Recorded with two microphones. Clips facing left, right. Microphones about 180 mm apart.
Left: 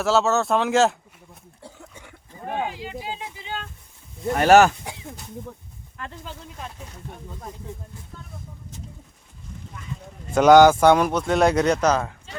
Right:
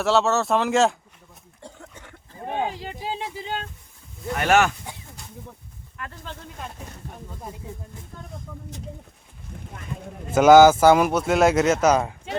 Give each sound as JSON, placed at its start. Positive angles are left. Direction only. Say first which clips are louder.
{"t": 0.0, "sound": "speech", "louder": "even", "side_deg": 0}
{"t": 1.6, "sound": "a sound", "louder": "right 1 dB", "side_deg": 10}
{"t": 2.6, "sound": "speech", "louder": "right 1 dB", "side_deg": -35}
{"t": 4.4, "sound": "speech", "louder": "left 5 dB", "side_deg": 35}
{"t": 6.0, "sound": "speech", "louder": "left 1 dB", "side_deg": 30}
{"t": 10.3, "sound": "speech", "louder": "right 1 dB", "side_deg": -5}